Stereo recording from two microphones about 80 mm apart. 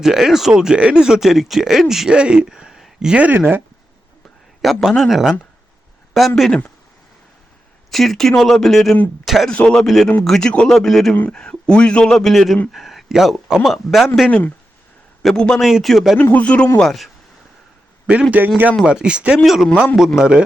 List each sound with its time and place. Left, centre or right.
0.0 s speech: centre; by 3.6 s right
4.6 s speech: centre
7.9 s speech: centre
9.5 s a man's voice: centre
14.3 s speech: centre
15.2 s speech: centre
16.1 s a man's voice: left
16.7 s speech: centre
18.0 s a man's voice: centre
18.9 s speech: centre